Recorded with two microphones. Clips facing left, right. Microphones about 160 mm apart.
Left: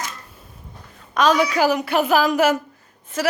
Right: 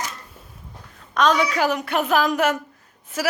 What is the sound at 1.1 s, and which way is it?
A woman's voice, 5° left (ahead or behind).